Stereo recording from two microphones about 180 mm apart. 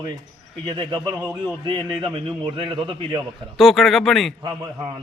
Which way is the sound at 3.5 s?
Centre (ahead or behind).